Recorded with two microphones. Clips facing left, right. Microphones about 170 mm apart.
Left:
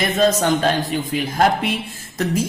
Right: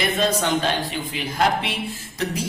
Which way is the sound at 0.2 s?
45° left (ahead or behind).